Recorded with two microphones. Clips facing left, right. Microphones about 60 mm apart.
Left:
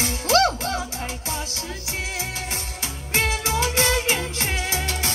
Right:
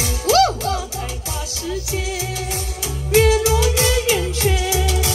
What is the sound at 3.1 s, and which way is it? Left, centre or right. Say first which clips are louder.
Music: right 9 dB; left.